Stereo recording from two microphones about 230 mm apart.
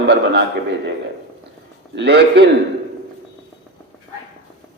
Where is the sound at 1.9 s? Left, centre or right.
Right.